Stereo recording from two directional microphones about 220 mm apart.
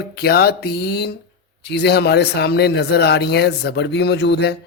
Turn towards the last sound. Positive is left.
turn(degrees=50)  # may be behind; listen again after turning